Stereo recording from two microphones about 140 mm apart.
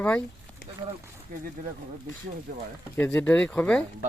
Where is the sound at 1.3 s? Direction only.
90° right.